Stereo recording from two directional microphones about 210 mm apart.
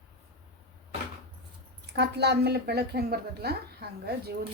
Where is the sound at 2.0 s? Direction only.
50° right (ahead or behind).